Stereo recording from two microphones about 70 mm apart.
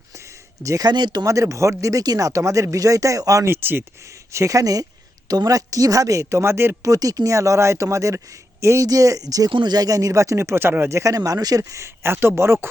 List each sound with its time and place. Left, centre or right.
0.1 s a sound: right
0.9 s speech: right
1.2 s speech: right
3.4 s speech: right
4.0 s speech: right
6.9 s speech: right